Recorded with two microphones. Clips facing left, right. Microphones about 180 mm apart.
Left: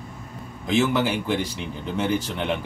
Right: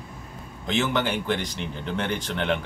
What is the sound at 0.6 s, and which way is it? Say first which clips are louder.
Speech: left 4 dB; 5° left (ahead or behind).